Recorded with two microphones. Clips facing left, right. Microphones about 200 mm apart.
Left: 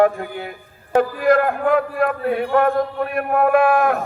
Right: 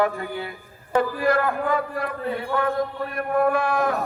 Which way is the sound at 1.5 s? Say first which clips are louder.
Left 6 dB; 60° left (ahead or behind).